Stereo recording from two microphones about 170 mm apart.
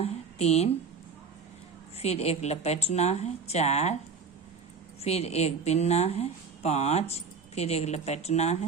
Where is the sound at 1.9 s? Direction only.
40° left (ahead or behind).